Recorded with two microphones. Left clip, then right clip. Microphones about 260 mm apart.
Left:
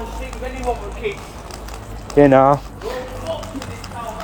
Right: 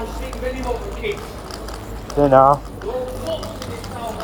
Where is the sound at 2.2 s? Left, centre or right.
Left.